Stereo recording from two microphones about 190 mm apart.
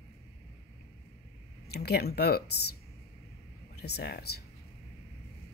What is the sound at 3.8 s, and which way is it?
Speech, 60° left (ahead or behind).